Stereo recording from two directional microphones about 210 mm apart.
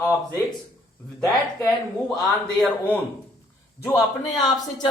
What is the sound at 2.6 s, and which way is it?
Speech, 5° left (ahead or behind).